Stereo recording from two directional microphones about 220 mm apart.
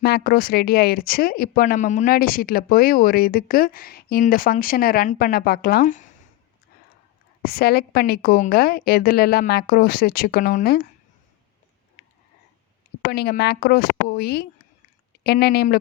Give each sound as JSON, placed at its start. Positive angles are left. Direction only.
{"t": 0.0, "sound": "speech", "side_deg": 45}
{"t": 7.4, "sound": "a woman's voice", "side_deg": 45}
{"t": 13.1, "sound": "a woman's voice", "side_deg": 45}